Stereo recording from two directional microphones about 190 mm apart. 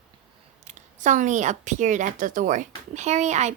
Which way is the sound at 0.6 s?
40° right (ahead or behind).